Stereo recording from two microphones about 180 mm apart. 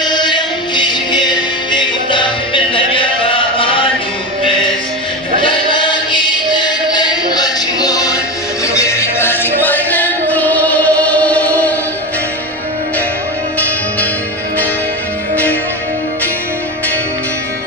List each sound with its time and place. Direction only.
0.0 s music: 25° left (ahead or behind)
5.4 s choir: 25° left (ahead or behind)
8.6 s music: 15° left (ahead or behind)